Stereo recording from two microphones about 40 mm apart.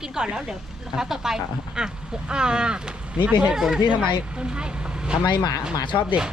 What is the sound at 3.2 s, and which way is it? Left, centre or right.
Speech, right.